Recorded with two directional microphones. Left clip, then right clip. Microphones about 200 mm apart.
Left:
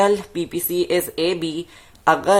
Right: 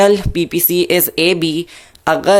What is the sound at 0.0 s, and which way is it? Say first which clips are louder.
Speech: right 6 dB; 20° right (ahead or behind).